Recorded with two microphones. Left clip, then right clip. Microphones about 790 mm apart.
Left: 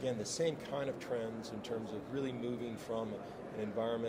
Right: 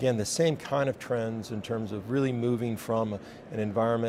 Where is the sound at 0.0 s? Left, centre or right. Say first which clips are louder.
Right 10 dB; right.